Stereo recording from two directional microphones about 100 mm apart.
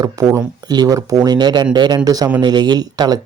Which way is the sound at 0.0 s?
35° right (ahead or behind).